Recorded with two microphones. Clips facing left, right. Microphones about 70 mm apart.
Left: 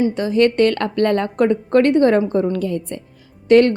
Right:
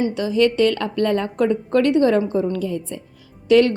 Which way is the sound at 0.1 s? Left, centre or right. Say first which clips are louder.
Left 2 dB; left.